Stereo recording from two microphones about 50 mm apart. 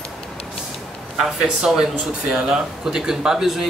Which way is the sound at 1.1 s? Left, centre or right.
Centre.